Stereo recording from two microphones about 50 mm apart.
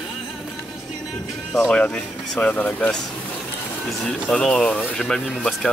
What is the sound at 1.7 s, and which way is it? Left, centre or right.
Speech, left.